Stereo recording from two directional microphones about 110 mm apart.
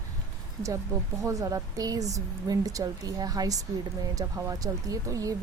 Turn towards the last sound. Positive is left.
turn(degrees=-30)  # may be behind; listen again after turning